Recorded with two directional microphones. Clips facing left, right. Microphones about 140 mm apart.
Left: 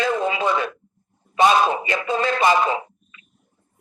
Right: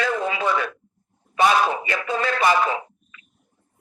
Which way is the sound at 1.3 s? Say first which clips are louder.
Left 2 dB; 20° left (ahead or behind).